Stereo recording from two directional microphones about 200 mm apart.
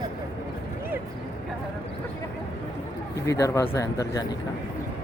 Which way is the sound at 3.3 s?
15° left (ahead or behind).